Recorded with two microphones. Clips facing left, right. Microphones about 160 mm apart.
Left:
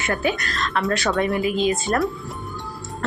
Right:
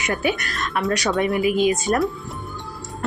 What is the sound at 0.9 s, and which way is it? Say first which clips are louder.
Speech: right 1 dB; 15° right (ahead or behind).